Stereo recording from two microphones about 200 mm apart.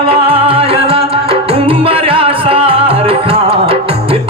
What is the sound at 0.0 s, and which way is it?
Music, 25° right (ahead or behind).